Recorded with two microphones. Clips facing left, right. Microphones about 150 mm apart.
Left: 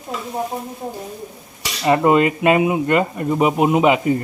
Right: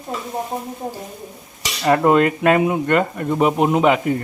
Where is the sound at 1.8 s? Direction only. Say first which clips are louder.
Even; 5° left (ahead or behind).